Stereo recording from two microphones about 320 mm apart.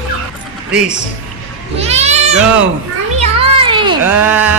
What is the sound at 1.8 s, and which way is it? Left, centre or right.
Speech, centre.